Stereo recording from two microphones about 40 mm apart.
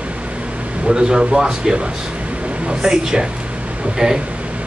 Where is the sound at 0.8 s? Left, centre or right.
Centre.